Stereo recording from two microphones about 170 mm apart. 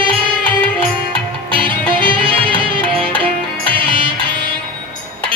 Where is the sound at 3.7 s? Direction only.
30° right (ahead or behind).